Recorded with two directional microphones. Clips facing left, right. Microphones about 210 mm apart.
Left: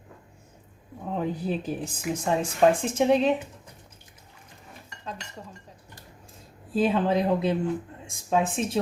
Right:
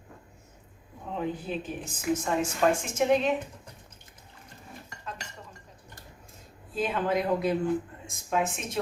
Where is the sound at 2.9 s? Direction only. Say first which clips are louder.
Left 3 dB; 30° left (ahead or behind).